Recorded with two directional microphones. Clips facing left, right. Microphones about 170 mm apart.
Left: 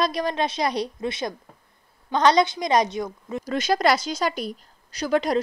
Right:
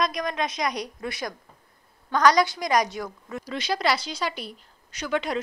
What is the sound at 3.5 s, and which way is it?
A woman's voice, 45° left (ahead or behind).